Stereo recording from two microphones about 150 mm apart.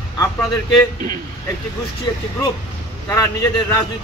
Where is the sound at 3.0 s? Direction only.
20° left (ahead or behind).